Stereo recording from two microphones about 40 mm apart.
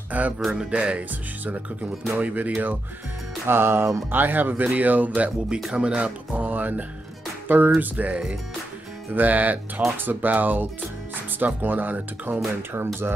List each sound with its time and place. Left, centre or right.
0.1 s speech: right
1.4 s speech: right
3.4 s speech: right
4.1 s speech: right
5.7 s speech: right
5.9 s speech: right
7.4 s speech: right
7.8 s speech: right
12.7 s speech: right